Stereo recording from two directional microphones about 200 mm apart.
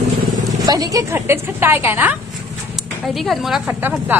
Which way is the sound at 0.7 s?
20° right (ahead or behind).